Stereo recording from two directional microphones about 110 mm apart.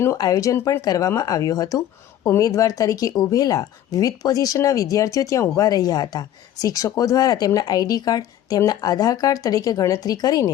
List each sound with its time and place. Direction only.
0.2 s speech: 30° left (ahead or behind)